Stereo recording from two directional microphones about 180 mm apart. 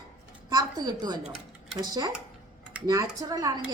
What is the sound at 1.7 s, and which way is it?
Speech, 25° right (ahead or behind).